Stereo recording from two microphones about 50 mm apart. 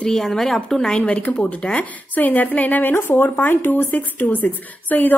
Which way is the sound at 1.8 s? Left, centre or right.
Left.